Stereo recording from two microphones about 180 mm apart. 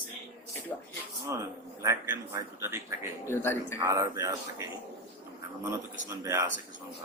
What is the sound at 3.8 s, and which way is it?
Speech, 15° right (ahead or behind).